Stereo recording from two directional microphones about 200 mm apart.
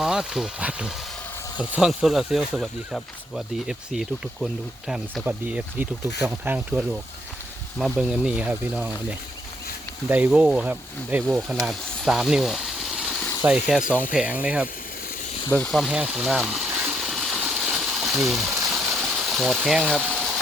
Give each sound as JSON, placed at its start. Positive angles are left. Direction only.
{"t": 0.0, "sound": "speech", "side_deg": -5}
{"t": 10.1, "sound": "speech", "side_deg": -5}
{"t": 15.4, "sound": "water", "side_deg": 5}
{"t": 18.7, "sound": "a sound", "side_deg": 0}